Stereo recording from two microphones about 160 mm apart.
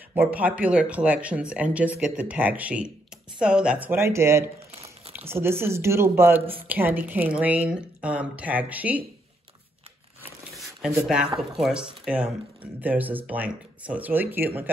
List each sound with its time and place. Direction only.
0.1 s speech: 10° right (ahead or behind)
10.5 s shuffling cards: centre (ahead or behind)
11.1 s speech: 5° right (ahead or behind)